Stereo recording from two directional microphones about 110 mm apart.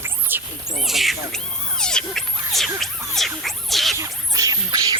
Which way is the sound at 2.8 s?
Centre (ahead or behind).